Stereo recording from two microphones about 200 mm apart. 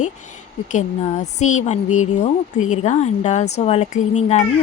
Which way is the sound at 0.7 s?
35° left (ahead or behind).